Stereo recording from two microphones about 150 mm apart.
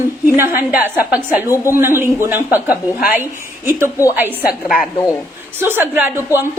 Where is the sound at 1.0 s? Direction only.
10° right (ahead or behind).